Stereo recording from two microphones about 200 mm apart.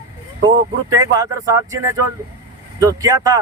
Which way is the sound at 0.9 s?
20° right (ahead or behind).